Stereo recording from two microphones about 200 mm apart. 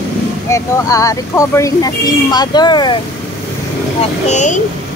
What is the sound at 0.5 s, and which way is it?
Speech, 15° left (ahead or behind).